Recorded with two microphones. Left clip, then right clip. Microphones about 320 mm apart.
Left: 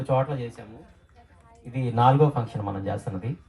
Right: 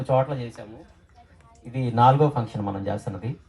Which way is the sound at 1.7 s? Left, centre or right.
Right.